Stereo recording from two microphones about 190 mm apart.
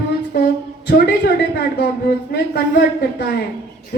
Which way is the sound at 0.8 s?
55° left (ahead or behind).